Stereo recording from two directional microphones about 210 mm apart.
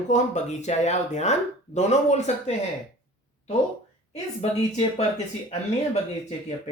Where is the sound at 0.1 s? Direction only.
35° left (ahead or behind).